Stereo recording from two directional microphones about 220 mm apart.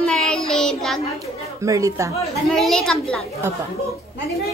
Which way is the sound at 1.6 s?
15° right (ahead or behind).